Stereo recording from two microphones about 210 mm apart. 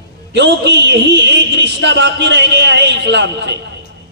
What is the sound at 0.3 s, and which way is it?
Speech, 55° right (ahead or behind).